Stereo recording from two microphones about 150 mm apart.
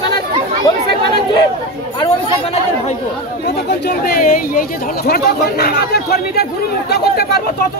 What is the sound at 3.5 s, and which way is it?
Speech, 90° left.